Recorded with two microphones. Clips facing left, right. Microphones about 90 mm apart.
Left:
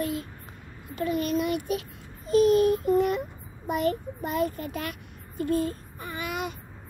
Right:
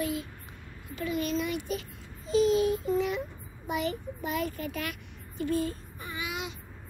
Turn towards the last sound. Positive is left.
turn(degrees=50)  # may be behind; listen again after turning